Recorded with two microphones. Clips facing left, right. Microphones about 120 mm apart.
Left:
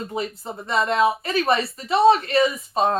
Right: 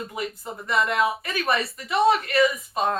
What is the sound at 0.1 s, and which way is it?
Speech, 30° left (ahead or behind).